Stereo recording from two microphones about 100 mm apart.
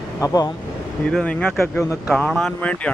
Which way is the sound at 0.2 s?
40° left (ahead or behind).